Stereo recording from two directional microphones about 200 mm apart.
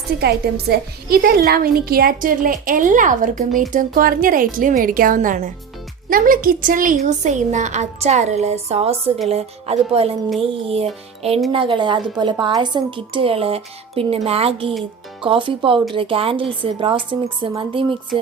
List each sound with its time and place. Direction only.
0.2 s a woman's voice: 55° right (ahead or behind); by 17.9 s 25° right (ahead or behind)